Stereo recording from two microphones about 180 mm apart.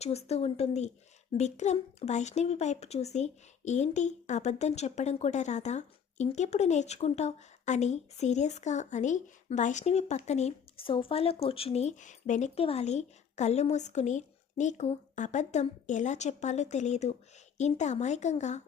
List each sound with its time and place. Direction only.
0.0 s a child's voice: 35° left (ahead or behind)